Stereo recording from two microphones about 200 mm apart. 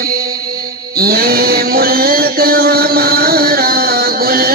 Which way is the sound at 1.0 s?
50° right (ahead or behind).